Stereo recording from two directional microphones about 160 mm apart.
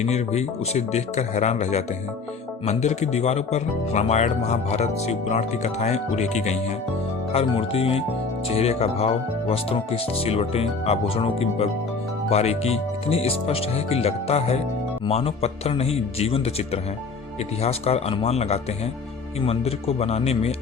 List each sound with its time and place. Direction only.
0.0 s speech: 45° left (ahead or behind)